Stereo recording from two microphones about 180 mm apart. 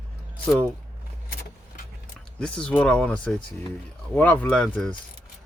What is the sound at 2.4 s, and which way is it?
Speech, 5° left (ahead or behind).